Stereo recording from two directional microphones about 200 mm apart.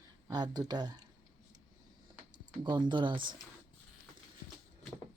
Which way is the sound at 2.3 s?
20° right (ahead or behind).